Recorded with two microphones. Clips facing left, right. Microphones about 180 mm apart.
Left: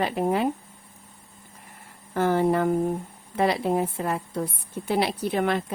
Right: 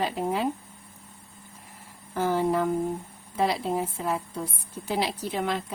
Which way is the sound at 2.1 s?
60° left (ahead or behind).